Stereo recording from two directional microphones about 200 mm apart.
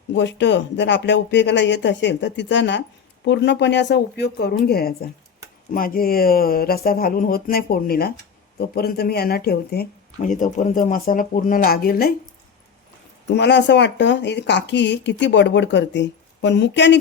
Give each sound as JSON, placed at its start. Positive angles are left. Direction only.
{"t": 0.1, "sound": "speech", "side_deg": 65}
{"t": 10.2, "sound": "speech", "side_deg": 40}
{"t": 13.3, "sound": "speech", "side_deg": 60}